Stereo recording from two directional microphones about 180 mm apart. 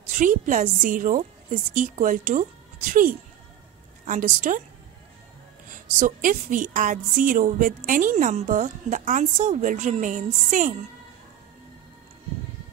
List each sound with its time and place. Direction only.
0.1 s a woman's voice: 45° right (ahead or behind)
5.7 s a woman's voice: 50° right (ahead or behind)